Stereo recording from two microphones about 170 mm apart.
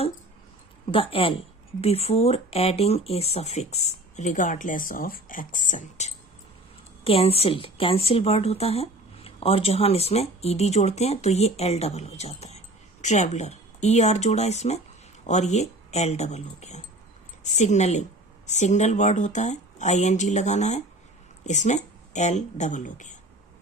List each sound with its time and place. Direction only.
0.9 s a woman's voice: 30° left (ahead or behind)
7.0 s a woman's voice: 35° left (ahead or behind)